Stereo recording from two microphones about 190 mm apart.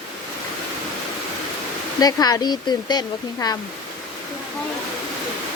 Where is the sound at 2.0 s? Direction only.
20° left (ahead or behind).